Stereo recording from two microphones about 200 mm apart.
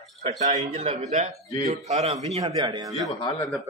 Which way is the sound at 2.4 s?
20° right (ahead or behind).